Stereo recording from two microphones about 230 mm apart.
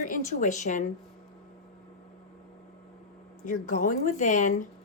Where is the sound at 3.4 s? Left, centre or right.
Left.